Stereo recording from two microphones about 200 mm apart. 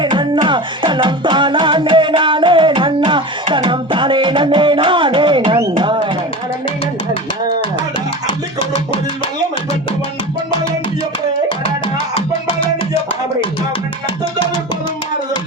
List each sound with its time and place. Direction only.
0.0 s music: 25° right (ahead or behind)